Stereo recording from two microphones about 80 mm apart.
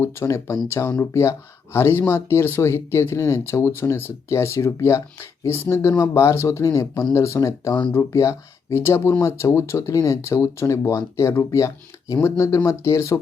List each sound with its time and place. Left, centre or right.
0.0 s speech: left